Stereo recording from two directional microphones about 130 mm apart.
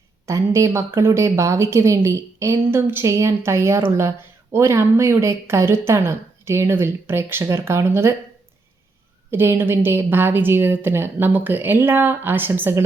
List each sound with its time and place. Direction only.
0.3 s speech: 25° right (ahead or behind)
9.3 s a woman's voice: 15° right (ahead or behind)